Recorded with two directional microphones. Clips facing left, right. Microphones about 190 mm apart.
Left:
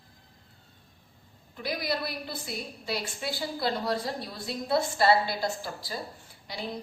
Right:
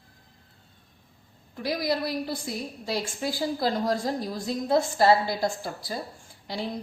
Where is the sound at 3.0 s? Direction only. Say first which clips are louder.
Right 5 dB; 45° right (ahead or behind).